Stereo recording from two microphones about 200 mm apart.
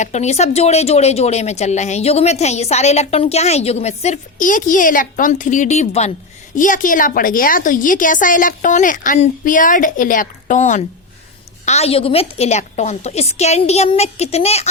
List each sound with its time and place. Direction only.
0.0 s speech: 35° left (ahead or behind)